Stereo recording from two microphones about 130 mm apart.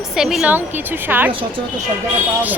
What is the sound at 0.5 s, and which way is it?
Speech, 15° right (ahead or behind).